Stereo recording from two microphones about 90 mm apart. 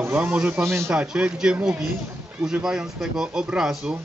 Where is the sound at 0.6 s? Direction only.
30° right (ahead or behind).